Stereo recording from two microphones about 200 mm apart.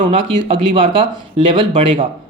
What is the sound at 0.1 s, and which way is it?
Speech, 25° right (ahead or behind).